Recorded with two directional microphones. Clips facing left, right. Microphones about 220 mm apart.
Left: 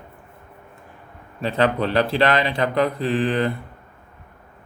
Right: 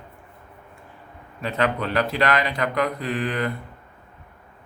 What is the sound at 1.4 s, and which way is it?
Speech, 30° left (ahead or behind).